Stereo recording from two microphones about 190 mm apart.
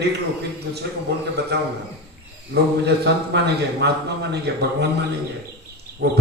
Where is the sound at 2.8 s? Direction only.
65° right (ahead or behind).